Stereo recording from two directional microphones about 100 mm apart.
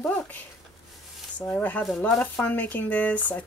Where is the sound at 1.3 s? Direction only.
15° left (ahead or behind).